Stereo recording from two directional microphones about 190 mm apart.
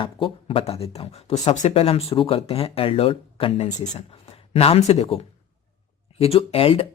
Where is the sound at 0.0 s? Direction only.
25° left (ahead or behind).